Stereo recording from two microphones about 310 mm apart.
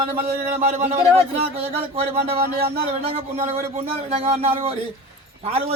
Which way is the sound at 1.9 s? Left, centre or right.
Centre.